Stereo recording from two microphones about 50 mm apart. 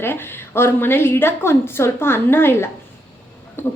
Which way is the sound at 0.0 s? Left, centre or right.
Left.